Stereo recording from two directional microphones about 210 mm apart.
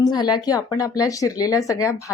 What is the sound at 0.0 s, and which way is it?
Speech, 20° left (ahead or behind).